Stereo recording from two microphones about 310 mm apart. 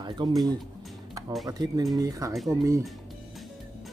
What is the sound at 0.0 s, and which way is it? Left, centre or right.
Speech, centre.